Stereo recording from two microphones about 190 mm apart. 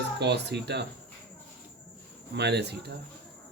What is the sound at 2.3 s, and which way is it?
Speech, 65° right (ahead or behind).